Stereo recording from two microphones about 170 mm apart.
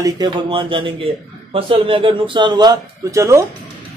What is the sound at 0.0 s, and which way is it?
A man's voice, 25° right (ahead or behind).